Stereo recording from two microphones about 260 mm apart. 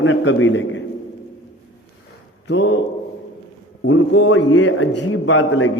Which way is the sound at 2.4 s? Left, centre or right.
Left.